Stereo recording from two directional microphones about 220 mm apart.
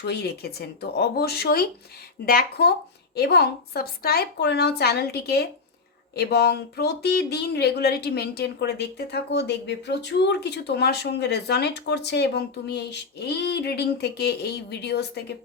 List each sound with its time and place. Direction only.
0.0 s speech: 45° left (ahead or behind)